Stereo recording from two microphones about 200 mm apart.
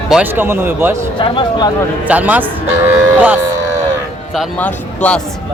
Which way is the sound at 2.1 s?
10° right (ahead or behind).